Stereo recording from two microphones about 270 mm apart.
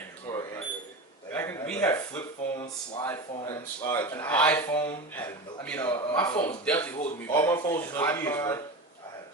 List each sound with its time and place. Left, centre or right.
0.3 s alarm: centre
1.3 s a sound: centre
3.0 s speech: centre
6.1 s speech: centre